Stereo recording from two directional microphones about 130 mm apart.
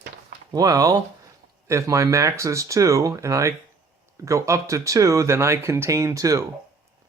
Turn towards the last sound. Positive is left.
turn(degrees=-25)  # may be behind; listen again after turning